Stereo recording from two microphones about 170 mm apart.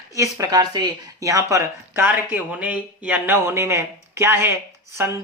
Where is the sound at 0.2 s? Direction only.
20° right (ahead or behind).